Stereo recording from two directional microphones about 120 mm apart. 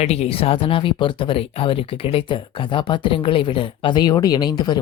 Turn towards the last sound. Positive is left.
turn(degrees=35)  # may be behind; listen again after turning